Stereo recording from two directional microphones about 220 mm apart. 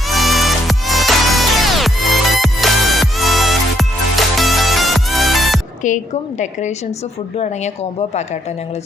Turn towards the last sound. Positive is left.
turn(degrees=30)  # may be behind; listen again after turning